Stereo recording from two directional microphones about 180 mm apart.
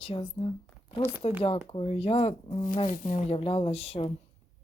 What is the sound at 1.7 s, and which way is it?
Speech, 30° left (ahead or behind).